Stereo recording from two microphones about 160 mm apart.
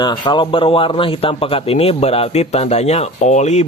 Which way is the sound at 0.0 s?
30° left (ahead or behind).